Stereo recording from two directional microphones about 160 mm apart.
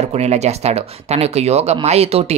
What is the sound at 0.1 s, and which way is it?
Speech, 45° right (ahead or behind).